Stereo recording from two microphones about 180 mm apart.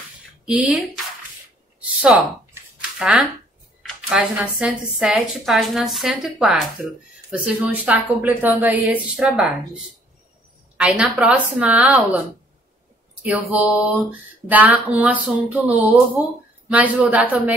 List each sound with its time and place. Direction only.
0.5 s speech: 5° right (ahead or behind)
2.0 s speech: 5° right (ahead or behind)
2.5 s a sound: 5° right (ahead or behind)
3.8 s speech: 5° right (ahead or behind)
10.8 s speech: 5° right (ahead or behind)
13.2 s speech: 10° right (ahead or behind)